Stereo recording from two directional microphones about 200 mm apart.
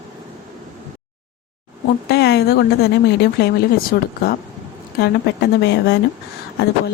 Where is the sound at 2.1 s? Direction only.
55° left (ahead or behind).